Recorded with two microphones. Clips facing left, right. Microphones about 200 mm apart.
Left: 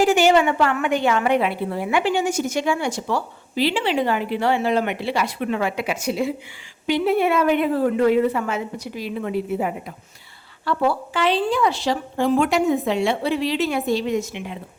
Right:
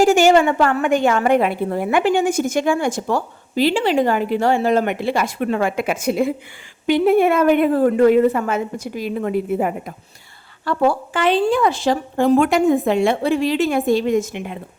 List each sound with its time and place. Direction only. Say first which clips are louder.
0.0 s a woman's voice: right 3 dB; 45° right (ahead or behind)